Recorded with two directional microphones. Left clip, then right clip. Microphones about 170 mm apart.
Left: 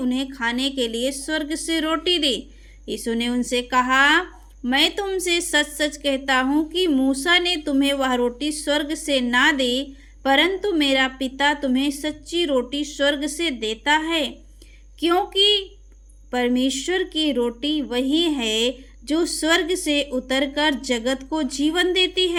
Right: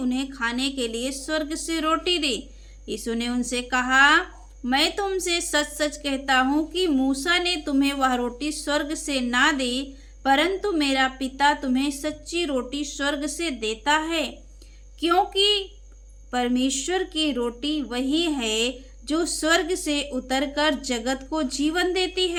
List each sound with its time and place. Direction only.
0.0 s a woman's voice: 20° left (ahead or behind)